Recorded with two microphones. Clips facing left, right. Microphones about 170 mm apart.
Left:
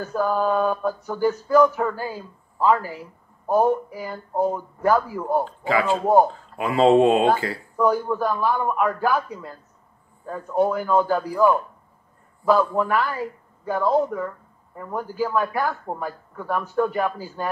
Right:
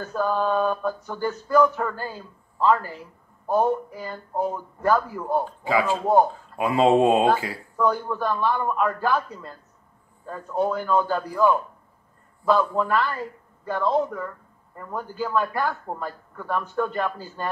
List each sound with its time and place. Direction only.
0.0 s speech: 10° left (ahead or behind)
5.4 s speech: 10° right (ahead or behind)
7.7 s speech: 10° left (ahead or behind)